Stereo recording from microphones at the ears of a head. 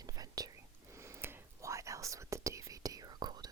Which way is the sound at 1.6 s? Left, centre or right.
Right.